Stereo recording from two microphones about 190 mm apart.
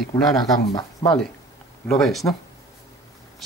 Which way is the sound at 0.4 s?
25° left (ahead or behind).